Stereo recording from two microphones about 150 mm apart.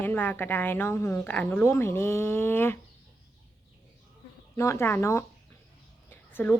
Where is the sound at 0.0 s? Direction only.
15° left (ahead or behind).